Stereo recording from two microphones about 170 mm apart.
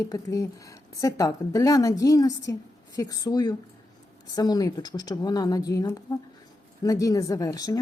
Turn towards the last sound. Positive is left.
turn(degrees=20)  # may be behind; listen again after turning